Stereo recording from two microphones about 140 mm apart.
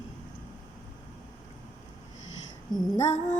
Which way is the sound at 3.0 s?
55° left (ahead or behind).